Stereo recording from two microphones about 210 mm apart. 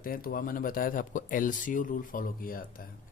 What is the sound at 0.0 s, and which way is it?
Speech, 45° left (ahead or behind).